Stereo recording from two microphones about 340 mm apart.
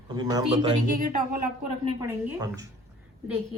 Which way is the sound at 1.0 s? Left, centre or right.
Right.